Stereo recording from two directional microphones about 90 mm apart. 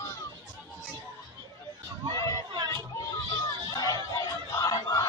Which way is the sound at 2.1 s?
50° right (ahead or behind).